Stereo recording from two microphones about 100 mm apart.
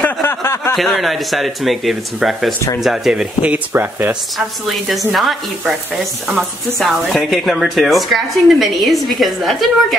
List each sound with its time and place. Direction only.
0.0 s a sound: 25° left (ahead or behind)
0.7 s speech: centre (ahead or behind); by 4.2 s 20° right (ahead or behind)
4.8 s speech: centre (ahead or behind)